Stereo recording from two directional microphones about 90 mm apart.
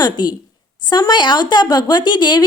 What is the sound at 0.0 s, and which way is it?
Speech, 50° left (ahead or behind).